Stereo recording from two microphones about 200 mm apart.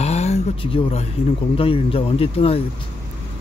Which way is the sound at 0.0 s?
30° left (ahead or behind).